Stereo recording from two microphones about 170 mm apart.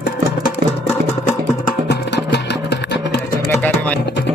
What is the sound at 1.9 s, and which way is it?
Music, 80° left.